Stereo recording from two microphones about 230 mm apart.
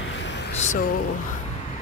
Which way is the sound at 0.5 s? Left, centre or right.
Left.